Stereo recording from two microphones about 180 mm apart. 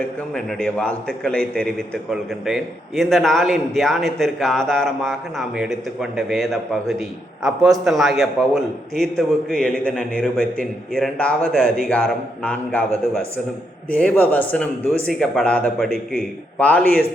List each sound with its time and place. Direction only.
0.3 s a man's voice: 5° left (ahead or behind)
13.9 s a man's voice: 10° left (ahead or behind)